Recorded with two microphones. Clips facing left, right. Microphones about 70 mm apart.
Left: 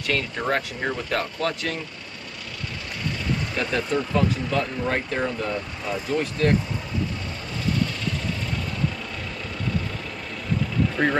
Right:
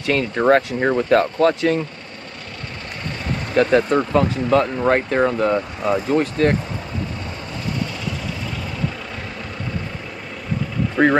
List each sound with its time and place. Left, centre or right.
0.4 s speech: right
3.5 s speech: right
11.0 s speech: centre